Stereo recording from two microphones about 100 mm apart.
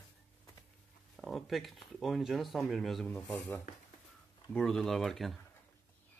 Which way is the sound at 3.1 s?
15° left (ahead or behind).